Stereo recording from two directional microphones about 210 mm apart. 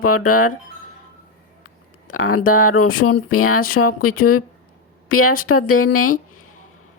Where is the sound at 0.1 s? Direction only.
90° left.